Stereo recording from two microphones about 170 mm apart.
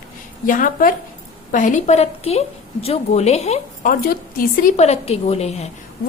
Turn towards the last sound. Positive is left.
turn(degrees=40)  # may be behind; listen again after turning